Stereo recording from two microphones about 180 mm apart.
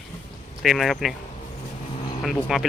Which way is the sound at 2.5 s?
Centre (ahead or behind).